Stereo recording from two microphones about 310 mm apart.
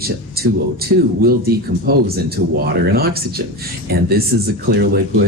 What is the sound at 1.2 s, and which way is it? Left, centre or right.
Speech, right.